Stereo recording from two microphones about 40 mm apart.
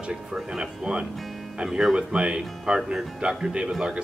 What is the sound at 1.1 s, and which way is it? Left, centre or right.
Music, centre.